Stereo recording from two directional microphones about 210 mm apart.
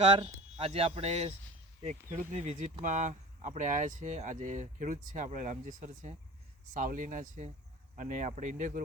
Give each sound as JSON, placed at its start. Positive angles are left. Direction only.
{"t": 0.2, "sound": "speech", "side_deg": -30}
{"t": 2.3, "sound": "speech", "side_deg": -30}